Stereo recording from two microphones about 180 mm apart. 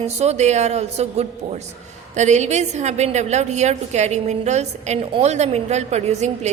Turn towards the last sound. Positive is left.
turn(degrees=-40)  # may be behind; listen again after turning